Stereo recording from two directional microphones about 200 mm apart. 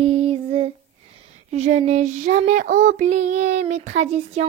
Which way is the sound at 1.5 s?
35° right (ahead or behind).